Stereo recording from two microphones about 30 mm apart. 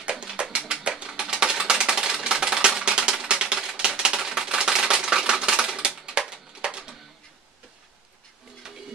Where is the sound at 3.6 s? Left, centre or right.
Right.